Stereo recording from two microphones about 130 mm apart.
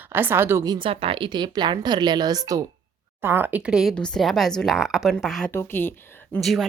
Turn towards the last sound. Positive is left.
turn(degrees=0)  # may be behind; listen again after turning